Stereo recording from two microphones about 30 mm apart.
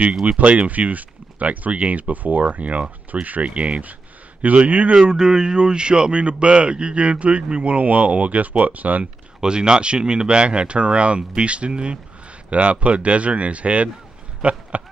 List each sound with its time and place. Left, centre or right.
0.2 s speech: right
4.4 s speech: right
4.9 s speech: right
9.4 s speech: right
14.4 s a sound: right